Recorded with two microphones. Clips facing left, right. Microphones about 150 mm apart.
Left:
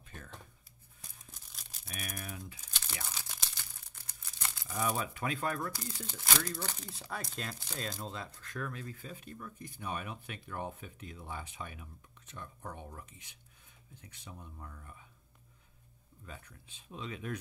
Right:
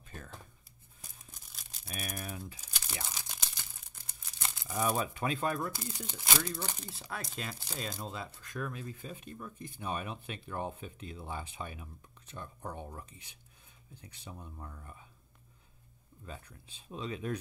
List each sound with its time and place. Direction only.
0.0 s a sound: 35° right (ahead or behind)
1.0 s tearing: centre (ahead or behind)
1.9 s typing: 35° right (ahead or behind)
3.2 s a sound: 15° right (ahead or behind)
4.3 s crumpling: 20° right (ahead or behind)
4.9 s speech: 25° right (ahead or behind)
16.3 s speech: 35° right (ahead or behind)